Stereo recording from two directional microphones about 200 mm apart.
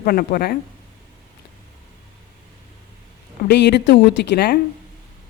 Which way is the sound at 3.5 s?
55° left (ahead or behind).